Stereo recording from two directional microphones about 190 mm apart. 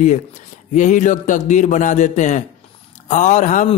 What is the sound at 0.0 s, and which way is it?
Speech, 40° left (ahead or behind).